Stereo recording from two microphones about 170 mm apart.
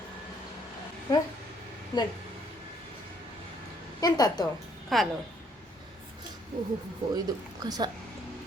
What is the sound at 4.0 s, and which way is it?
Speech, 20° left (ahead or behind).